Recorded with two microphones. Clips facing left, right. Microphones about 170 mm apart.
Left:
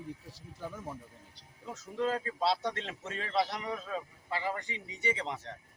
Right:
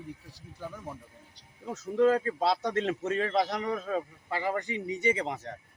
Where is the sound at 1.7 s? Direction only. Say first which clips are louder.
Right 9 dB; 45° right (ahead or behind).